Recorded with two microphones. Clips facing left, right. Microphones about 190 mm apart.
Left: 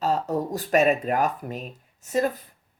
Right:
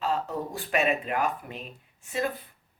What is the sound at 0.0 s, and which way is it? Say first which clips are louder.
Speech: left 5 dB; 40° left (ahead or behind).